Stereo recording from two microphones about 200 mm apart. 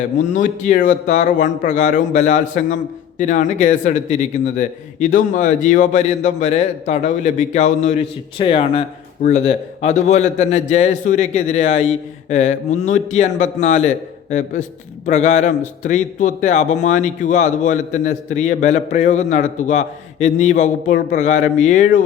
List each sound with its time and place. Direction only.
0.2 s a man's voice: 40° left (ahead or behind)